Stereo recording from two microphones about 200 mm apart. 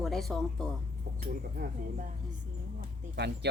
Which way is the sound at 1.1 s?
45° right (ahead or behind).